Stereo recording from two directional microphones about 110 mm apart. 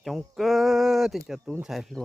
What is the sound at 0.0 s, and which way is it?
Speech, centre (ahead or behind).